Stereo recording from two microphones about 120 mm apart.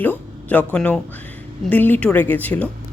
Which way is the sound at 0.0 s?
15° left (ahead or behind).